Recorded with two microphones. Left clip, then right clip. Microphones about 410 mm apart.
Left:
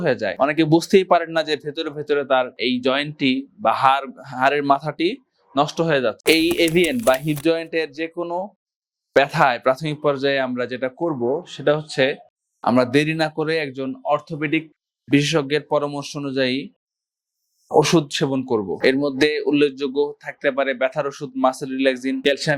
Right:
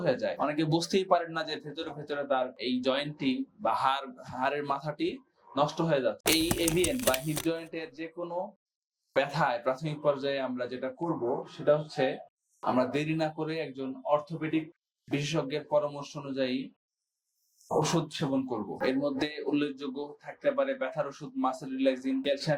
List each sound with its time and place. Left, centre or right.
0.0 s speech: left
6.9 s speech: centre
7.4 s speech: left
17.7 s speech: left